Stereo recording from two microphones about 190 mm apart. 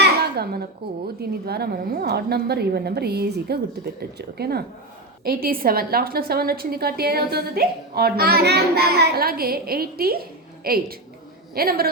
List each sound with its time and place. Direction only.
0.0 s a woman's voice: 55° right (ahead or behind)